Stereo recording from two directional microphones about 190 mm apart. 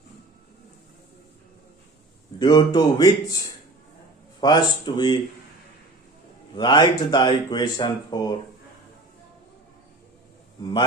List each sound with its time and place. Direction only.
2.4 s speech: 20° left (ahead or behind)
4.4 s speech: 25° left (ahead or behind)
6.6 s speech: 25° left (ahead or behind)
10.6 s speech: 25° left (ahead or behind)